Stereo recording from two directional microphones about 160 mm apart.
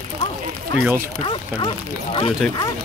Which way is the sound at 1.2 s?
35° left (ahead or behind).